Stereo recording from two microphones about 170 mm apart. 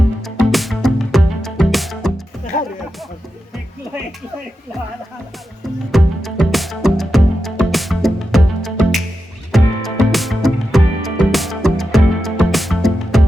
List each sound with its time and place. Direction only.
0.2 s music: centre (ahead or behind)
2.5 s music: 40° left (ahead or behind)
5.9 s music: centre (ahead or behind)